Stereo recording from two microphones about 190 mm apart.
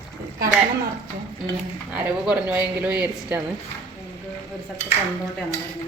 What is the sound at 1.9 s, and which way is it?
Speech, 10° right (ahead or behind).